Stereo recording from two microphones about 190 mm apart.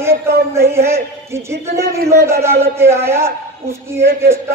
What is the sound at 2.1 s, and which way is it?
A man's voice, 15° right (ahead or behind).